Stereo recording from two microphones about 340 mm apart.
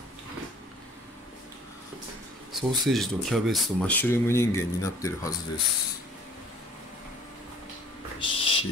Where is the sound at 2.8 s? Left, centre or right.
Centre.